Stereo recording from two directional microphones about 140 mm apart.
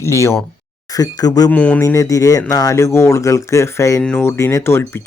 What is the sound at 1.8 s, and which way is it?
Speech, 25° left (ahead or behind).